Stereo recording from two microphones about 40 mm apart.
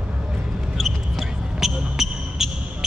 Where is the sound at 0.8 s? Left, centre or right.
Centre.